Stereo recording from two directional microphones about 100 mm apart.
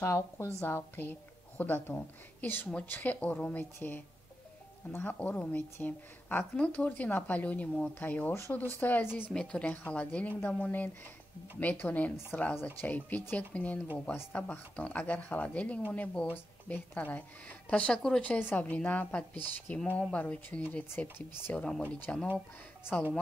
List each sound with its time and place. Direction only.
0.0 s speech: 25° left (ahead or behind)
9.3 s speech: 10° left (ahead or behind)